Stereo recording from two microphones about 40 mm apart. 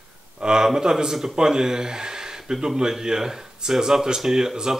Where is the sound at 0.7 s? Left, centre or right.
Centre.